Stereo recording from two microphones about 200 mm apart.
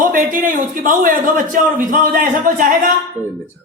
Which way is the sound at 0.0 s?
45° right (ahead or behind).